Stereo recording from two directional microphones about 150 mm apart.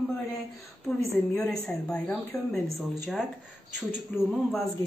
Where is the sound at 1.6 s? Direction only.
5° left (ahead or behind).